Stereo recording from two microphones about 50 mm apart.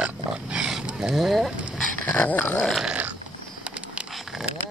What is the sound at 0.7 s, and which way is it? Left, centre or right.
Speech, centre.